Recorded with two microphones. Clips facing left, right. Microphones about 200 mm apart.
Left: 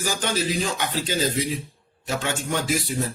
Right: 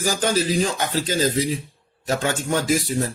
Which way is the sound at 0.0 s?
40° right (ahead or behind).